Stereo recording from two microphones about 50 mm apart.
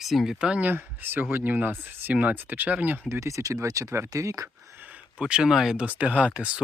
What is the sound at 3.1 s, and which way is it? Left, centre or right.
Speech, right.